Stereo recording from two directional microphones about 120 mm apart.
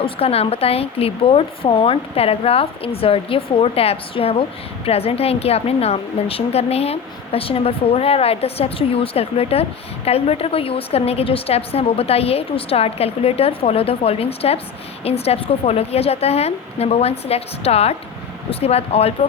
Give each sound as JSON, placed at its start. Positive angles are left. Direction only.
{"t": 0.0, "sound": "a woman's voice", "side_deg": 55}